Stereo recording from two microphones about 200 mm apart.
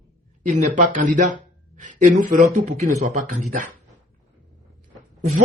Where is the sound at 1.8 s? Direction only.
40° right (ahead or behind).